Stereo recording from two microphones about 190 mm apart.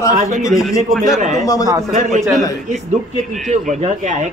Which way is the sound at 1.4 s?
15° left (ahead or behind).